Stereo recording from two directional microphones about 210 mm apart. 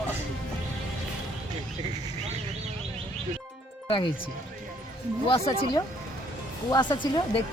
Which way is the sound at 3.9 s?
25° left (ahead or behind).